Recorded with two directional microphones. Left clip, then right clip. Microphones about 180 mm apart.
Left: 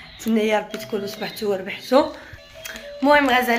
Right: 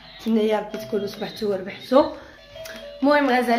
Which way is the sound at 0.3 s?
5° left (ahead or behind).